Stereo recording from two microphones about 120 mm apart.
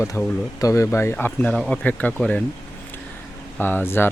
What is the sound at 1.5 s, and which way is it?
Speech, 5° left (ahead or behind).